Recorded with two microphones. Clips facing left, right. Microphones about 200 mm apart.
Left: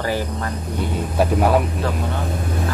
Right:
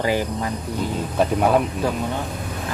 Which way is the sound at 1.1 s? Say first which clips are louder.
Left 1 dB; 5° left (ahead or behind).